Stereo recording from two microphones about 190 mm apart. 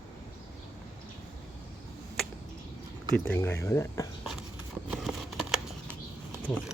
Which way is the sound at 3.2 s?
10° left (ahead or behind).